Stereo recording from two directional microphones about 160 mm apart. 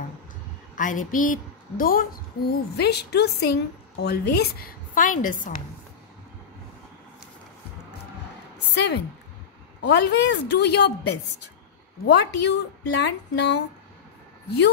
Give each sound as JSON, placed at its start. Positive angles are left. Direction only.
{"t": 0.7, "sound": "a woman's voice", "side_deg": 55}
{"t": 2.8, "sound": "a woman's voice", "side_deg": 90}
{"t": 8.7, "sound": "a woman's voice", "side_deg": 90}